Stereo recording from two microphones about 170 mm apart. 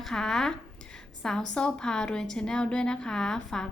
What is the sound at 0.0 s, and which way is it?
A woman's voice, 5° left (ahead or behind).